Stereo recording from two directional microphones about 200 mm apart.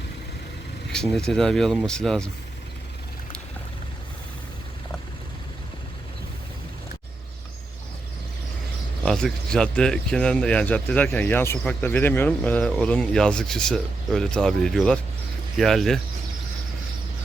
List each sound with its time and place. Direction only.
0.9 s speech: 5° left (ahead or behind)
9.0 s speech: 5° left (ahead or behind)